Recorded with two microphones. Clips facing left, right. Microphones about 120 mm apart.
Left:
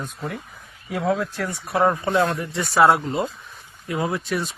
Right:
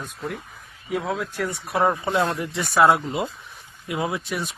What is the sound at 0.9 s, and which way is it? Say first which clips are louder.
Speech: left 3 dB; centre (ahead or behind).